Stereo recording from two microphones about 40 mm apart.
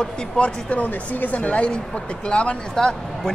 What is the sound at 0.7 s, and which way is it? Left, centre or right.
A woman's voice, left.